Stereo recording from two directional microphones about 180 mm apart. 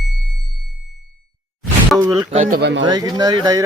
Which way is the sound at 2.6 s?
80° right.